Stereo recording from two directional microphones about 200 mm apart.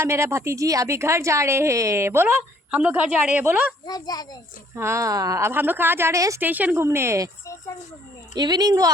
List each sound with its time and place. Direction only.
0.0 s a woman's voice: 15° right (ahead or behind)
3.8 s a child's voice: 20° left (ahead or behind)
4.7 s a woman's voice: 15° right (ahead or behind)
8.4 s speech: 20° right (ahead or behind)